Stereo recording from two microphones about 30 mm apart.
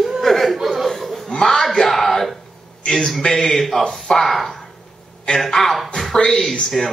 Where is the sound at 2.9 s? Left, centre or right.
Centre.